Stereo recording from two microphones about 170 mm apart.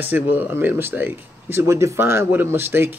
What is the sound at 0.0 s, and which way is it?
Speech, 10° right (ahead or behind).